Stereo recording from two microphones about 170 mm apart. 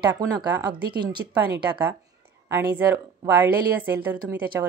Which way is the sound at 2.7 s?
10° right (ahead or behind).